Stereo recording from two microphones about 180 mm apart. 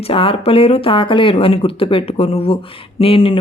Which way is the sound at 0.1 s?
30° left (ahead or behind).